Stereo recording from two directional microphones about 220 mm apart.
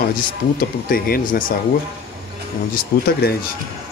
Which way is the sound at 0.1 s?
40° left (ahead or behind).